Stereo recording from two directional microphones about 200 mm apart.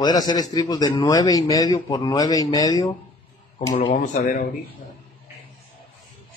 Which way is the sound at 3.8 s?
35° left (ahead or behind).